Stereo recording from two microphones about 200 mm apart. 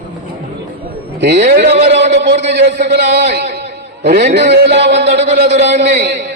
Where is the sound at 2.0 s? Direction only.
55° right (ahead or behind).